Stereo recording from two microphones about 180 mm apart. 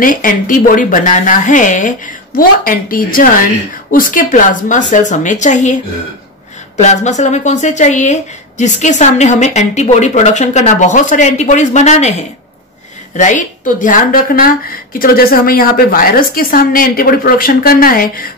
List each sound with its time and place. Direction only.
0.0 s a woman's voice: 50° left (ahead or behind)
6.8 s a woman's voice: 40° left (ahead or behind)